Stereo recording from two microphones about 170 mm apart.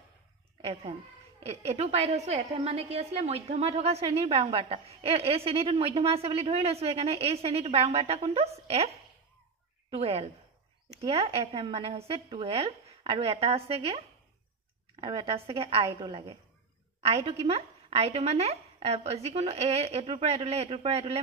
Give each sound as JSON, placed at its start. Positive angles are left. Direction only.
{"t": 1.4, "sound": "a woman's voice", "side_deg": -35}